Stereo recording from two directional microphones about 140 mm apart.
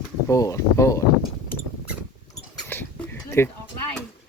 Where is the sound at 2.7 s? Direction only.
15° left (ahead or behind).